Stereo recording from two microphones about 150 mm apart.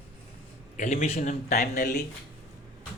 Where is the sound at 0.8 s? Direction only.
55° left (ahead or behind).